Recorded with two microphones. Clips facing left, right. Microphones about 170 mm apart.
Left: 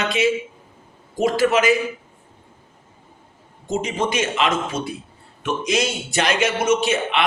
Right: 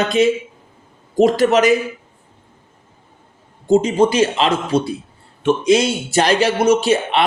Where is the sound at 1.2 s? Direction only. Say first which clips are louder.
Right 4 dB; 40° right (ahead or behind).